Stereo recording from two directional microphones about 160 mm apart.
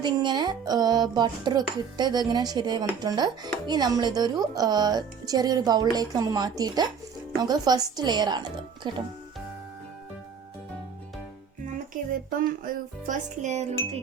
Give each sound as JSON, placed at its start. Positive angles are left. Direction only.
{"t": 0.0, "sound": "speech", "side_deg": -25}
{"t": 11.9, "sound": "speech", "side_deg": -55}